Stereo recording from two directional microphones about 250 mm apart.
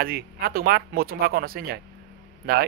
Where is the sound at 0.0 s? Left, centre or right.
Right.